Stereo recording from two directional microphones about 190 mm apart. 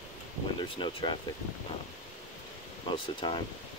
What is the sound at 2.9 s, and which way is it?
Speech, 25° left (ahead or behind).